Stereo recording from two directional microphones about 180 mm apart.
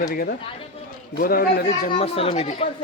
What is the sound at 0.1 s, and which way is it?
A man's voice, 55° left (ahead or behind).